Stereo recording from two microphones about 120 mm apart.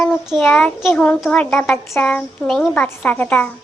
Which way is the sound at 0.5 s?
5° left (ahead or behind).